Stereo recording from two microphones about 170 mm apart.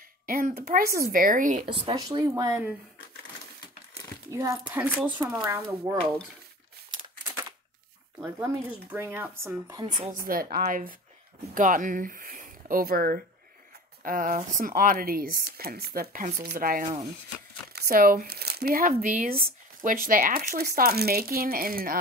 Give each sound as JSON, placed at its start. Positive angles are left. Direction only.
{"t": 0.3, "sound": "speech", "side_deg": -55}
{"t": 2.0, "sound": "speech", "side_deg": -20}
{"t": 4.3, "sound": "speech", "side_deg": -15}
{"t": 8.2, "sound": "speech", "side_deg": -15}
{"t": 10.1, "sound": "speech", "side_deg": -60}